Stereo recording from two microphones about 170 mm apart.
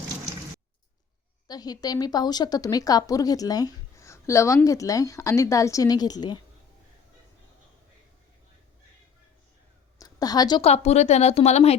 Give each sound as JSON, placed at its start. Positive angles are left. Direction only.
{"t": 1.5, "sound": "a woman's voice", "side_deg": 20}
{"t": 10.0, "sound": "a sound", "side_deg": 20}
{"t": 10.6, "sound": "speech", "side_deg": 40}